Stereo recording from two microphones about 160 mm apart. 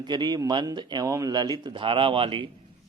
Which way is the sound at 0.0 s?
25° right (ahead or behind).